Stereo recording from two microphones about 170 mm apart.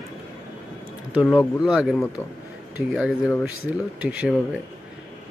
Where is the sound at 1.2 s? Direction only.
10° left (ahead or behind).